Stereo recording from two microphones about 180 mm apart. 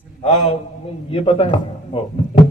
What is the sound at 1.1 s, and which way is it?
Speech, 35° left (ahead or behind).